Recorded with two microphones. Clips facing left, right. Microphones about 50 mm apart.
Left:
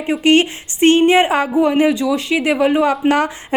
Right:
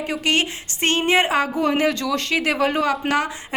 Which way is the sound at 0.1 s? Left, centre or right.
Left.